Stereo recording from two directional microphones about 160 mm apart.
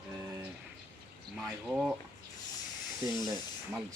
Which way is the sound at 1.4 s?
5° right (ahead or behind).